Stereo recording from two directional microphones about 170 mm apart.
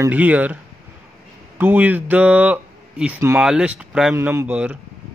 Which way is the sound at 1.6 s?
10° right (ahead or behind).